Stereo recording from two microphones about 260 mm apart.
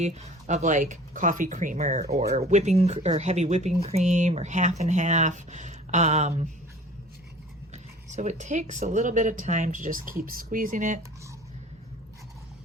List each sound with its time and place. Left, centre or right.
0.0 s speech: right
2.3 s speech: right
7.7 s speech: right